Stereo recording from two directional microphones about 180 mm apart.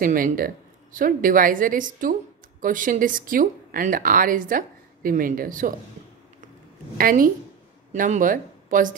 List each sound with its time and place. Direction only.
0.0 s speech: 50° right (ahead or behind)
7.0 s speech: 55° right (ahead or behind)